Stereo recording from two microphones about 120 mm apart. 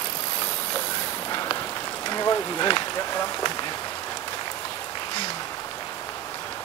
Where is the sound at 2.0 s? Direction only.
30° left (ahead or behind).